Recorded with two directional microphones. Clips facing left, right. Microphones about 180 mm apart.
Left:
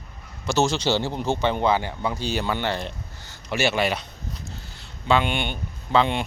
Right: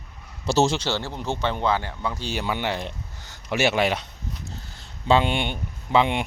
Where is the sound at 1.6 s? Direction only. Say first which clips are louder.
Left 2 dB; 5° left (ahead or behind); by 4.0 s 15° right (ahead or behind).